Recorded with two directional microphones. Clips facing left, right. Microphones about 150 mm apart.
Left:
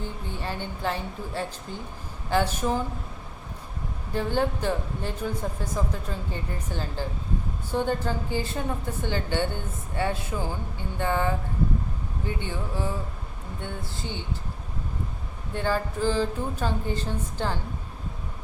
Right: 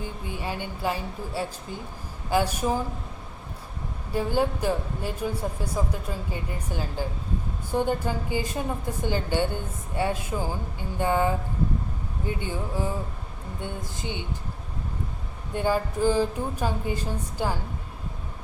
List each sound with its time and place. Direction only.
0.0 s speech: 10° right (ahead or behind)
4.1 s speech: 10° right (ahead or behind)
12.4 s speech: 15° right (ahead or behind)
15.5 s speech: 15° right (ahead or behind)